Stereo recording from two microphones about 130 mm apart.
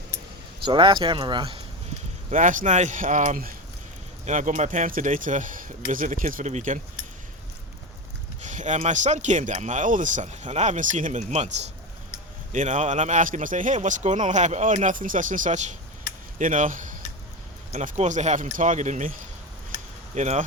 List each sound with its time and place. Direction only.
0.6 s speech: 40° right (ahead or behind)
2.3 s speech: 80° right
4.3 s speech: 65° right (ahead or behind)
8.4 s speech: 65° right (ahead or behind)
12.5 s speech: 70° right (ahead or behind)
16.4 s speech: 75° right (ahead or behind)
17.7 s speech: 60° right (ahead or behind)
20.1 s speech: 60° right (ahead or behind)